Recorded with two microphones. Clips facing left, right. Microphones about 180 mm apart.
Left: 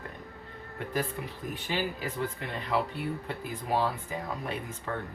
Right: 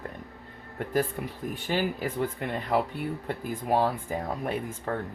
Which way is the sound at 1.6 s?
45° right (ahead or behind).